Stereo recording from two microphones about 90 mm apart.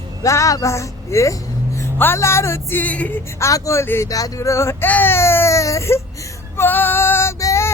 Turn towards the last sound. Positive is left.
turn(degrees=35)  # may be behind; listen again after turning